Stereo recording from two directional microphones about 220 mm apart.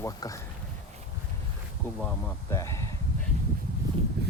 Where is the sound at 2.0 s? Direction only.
5° left (ahead or behind).